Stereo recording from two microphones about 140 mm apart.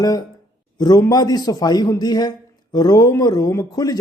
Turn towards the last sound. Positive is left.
turn(degrees=25)  # may be behind; listen again after turning